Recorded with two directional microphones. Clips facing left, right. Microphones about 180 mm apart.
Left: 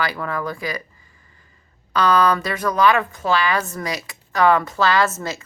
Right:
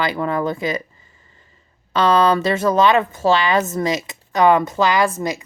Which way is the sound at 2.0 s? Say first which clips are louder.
Right 2 dB; 25° right (ahead or behind).